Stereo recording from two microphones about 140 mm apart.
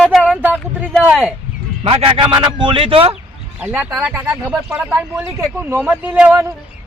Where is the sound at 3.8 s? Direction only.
Centre (ahead or behind).